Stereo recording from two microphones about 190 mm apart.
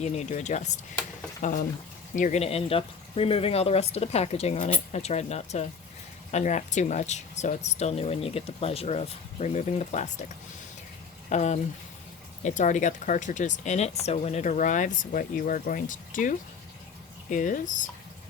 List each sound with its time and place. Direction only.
0.0 s speech: 35° left (ahead or behind)
11.3 s speech: 40° left (ahead or behind)